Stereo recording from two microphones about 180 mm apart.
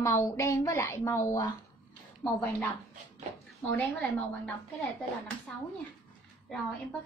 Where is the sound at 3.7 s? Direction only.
10° left (ahead or behind).